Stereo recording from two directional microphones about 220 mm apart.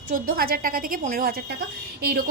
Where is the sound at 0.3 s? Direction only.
40° right (ahead or behind).